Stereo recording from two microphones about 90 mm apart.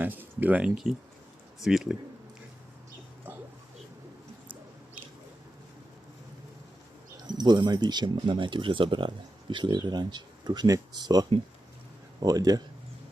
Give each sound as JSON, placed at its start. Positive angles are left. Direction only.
{"t": 0.0, "sound": "speech", "side_deg": -20}
{"t": 1.6, "sound": "speech", "side_deg": -5}
{"t": 7.3, "sound": "speech", "side_deg": -55}